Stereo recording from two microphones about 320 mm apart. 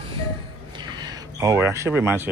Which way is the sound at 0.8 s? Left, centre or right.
Centre.